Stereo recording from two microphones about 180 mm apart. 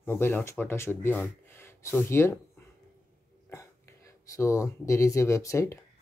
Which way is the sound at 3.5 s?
15° left (ahead or behind).